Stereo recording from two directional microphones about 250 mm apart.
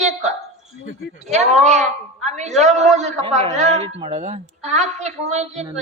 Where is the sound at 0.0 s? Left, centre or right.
Right.